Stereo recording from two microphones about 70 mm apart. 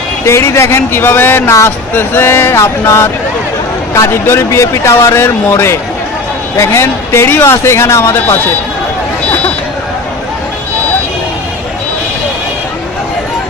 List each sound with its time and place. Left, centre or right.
0.3 s speech: left
9.2 s vehicle: left